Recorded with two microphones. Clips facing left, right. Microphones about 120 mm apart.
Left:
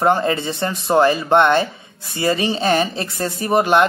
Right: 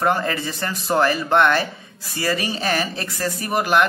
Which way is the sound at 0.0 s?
25° left (ahead or behind).